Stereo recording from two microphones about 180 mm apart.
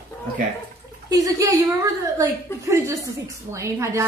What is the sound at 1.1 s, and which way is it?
A woman's voice, 20° right (ahead or behind).